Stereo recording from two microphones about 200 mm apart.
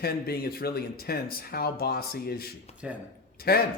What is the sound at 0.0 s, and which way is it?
Speech, 50° left (ahead or behind).